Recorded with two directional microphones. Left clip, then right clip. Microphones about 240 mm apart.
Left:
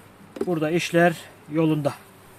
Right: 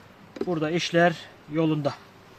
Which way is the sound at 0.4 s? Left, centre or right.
Centre.